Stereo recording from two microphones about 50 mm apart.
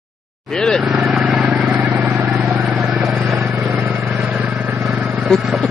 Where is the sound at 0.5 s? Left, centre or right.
Centre.